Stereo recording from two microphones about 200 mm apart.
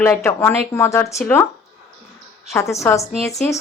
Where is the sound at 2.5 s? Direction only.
15° left (ahead or behind).